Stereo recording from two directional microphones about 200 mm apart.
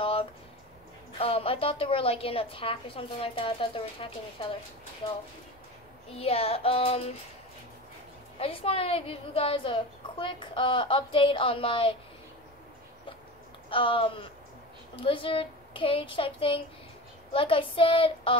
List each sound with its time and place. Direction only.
0.0 s a sound: 30° left (ahead or behind)
1.1 s a woman's voice: 30° left (ahead or behind)
6.1 s a woman's voice: 30° left (ahead or behind)
8.4 s a woman's voice: 30° left (ahead or behind)
13.7 s a woman's voice: 25° left (ahead or behind)